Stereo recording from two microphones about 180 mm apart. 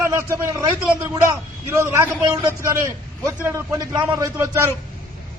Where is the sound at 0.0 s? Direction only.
15° right (ahead or behind).